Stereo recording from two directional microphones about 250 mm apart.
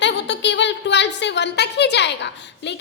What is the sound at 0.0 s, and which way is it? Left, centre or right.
A woman's voice, left.